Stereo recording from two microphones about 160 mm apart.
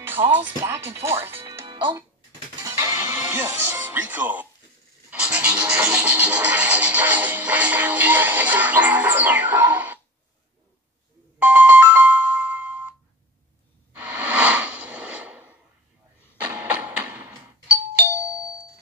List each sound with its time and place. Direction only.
0.0 s music: 10° right (ahead or behind)
1.7 s a child's voice: 30° right (ahead or behind)
2.6 s music: 20° right (ahead or behind)
11.3 s music: 10° right (ahead or behind)
13.9 s a sound: 10° right (ahead or behind)
16.3 s music: 10° right (ahead or behind)